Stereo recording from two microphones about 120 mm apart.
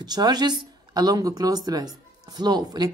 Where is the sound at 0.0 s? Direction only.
35° right (ahead or behind).